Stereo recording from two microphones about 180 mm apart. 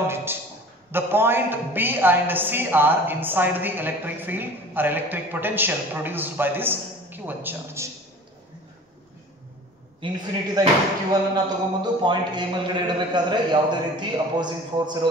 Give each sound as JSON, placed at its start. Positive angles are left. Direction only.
{"t": 0.1, "sound": "a sound", "side_deg": -10}
{"t": 0.9, "sound": "a woman's voice", "side_deg": -10}
{"t": 9.9, "sound": "speech", "side_deg": -30}